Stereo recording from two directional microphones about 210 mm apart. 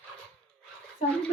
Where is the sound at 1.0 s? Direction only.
35° left (ahead or behind).